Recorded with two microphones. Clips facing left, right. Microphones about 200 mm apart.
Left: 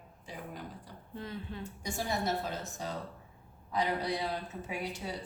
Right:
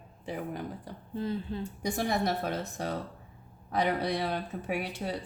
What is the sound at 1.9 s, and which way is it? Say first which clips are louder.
Speech: right 4 dB; 65° right (ahead or behind).